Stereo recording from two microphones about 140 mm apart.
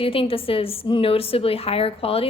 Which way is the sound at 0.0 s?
40° left (ahead or behind).